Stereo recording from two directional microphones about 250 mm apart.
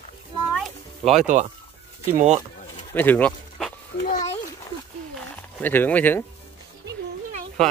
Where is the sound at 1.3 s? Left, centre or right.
Right.